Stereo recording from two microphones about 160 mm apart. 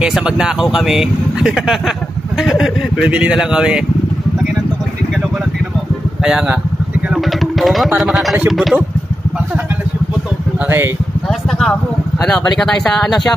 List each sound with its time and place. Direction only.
0.0 s speech: 5° right (ahead or behind)
6.2 s speech: 5° right (ahead or behind)
7.1 s music: centre (ahead or behind)
8.0 s speech: centre (ahead or behind)
12.2 s speech: 5° left (ahead or behind)